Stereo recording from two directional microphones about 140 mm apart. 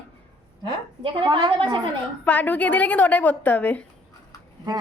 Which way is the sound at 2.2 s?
10° left (ahead or behind).